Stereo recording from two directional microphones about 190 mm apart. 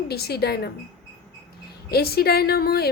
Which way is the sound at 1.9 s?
55° left (ahead or behind).